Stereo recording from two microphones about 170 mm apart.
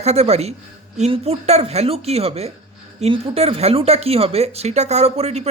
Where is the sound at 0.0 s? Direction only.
40° right (ahead or behind).